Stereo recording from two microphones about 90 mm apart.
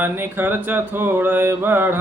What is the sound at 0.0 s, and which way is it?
Mantra, 20° right (ahead or behind).